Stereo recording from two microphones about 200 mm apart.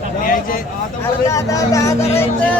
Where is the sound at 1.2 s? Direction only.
15° left (ahead or behind).